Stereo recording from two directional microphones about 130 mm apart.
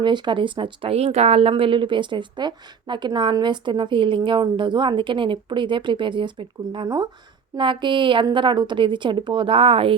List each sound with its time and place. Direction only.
0.0 s a woman's voice: 40° right (ahead or behind)
6.8 s speech: 25° right (ahead or behind)
7.5 s a woman's voice: 40° right (ahead or behind)